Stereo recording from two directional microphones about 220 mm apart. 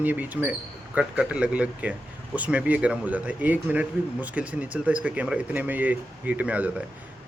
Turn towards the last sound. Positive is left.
turn(degrees=-5)  # may be behind; listen again after turning